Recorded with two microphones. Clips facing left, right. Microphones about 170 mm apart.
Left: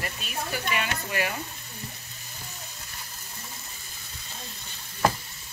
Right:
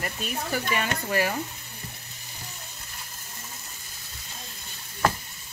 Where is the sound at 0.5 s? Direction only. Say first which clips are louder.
Right 2 dB; 40° right (ahead or behind).